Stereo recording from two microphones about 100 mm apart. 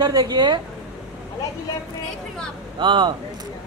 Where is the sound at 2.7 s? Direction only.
50° right (ahead or behind).